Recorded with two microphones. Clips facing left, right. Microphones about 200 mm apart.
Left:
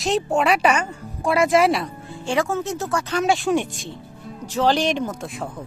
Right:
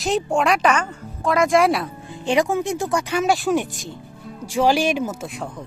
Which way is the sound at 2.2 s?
15° right (ahead or behind).